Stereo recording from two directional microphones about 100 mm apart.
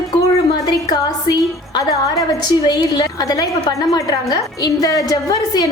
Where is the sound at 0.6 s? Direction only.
40° left (ahead or behind).